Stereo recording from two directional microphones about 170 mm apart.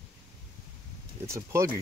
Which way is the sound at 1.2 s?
15° right (ahead or behind).